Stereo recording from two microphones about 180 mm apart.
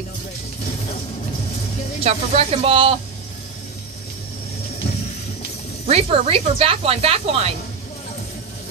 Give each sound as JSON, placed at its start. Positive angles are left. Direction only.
{"t": 2.0, "sound": "speech", "side_deg": -35}
{"t": 5.9, "sound": "speech", "side_deg": -35}